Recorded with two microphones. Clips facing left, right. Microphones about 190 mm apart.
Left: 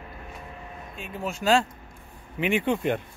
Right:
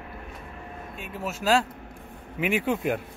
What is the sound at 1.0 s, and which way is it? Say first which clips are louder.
Speech: left 1 dB; 5° right (ahead or behind).